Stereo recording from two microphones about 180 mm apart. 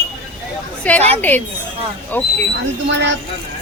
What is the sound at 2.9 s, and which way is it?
Speech, 80° right.